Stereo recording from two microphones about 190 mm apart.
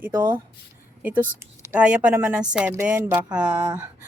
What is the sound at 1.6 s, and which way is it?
Speech, 10° right (ahead or behind).